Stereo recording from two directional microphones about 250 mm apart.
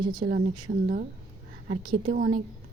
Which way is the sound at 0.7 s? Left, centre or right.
Right.